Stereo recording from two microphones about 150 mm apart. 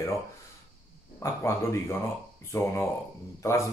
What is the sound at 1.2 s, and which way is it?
Speech, 20° left (ahead or behind).